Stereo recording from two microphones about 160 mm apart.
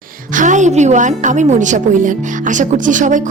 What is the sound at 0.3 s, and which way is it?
A woman's voice, 50° right (ahead or behind).